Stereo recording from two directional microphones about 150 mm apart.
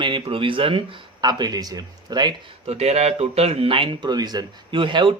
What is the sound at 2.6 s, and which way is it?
Speech, 45° right (ahead or behind).